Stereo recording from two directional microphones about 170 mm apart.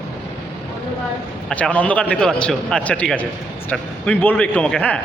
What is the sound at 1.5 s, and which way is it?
A man's voice, 5° left (ahead or behind).